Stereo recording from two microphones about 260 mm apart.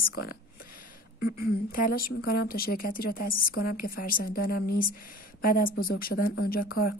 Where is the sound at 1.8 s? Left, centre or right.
Left.